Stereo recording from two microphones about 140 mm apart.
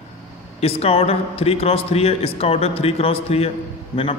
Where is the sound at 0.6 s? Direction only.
45° left (ahead or behind).